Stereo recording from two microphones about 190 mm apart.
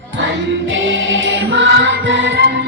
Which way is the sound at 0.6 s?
80° right.